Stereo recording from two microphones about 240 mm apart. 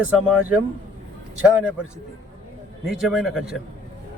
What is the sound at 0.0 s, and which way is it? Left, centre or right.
Speech, centre.